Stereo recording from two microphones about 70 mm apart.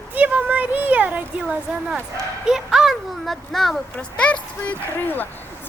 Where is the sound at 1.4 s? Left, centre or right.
Centre.